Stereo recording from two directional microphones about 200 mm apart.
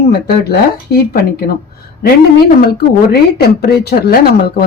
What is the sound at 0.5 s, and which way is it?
Speech, 50° left (ahead or behind).